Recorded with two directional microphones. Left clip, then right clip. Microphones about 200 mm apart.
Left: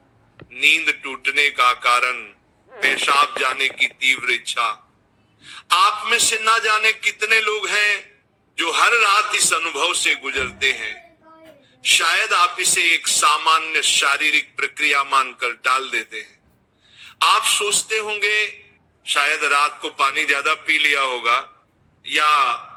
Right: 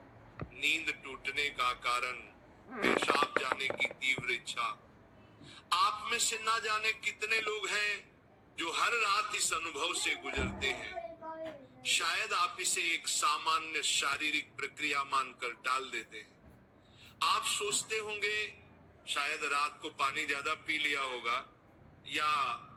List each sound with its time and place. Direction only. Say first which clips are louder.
0.5 s speech: left 17 dB; 50° left (ahead or behind)